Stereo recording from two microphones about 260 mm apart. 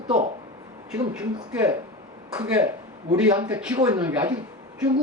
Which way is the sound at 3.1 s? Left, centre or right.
Centre.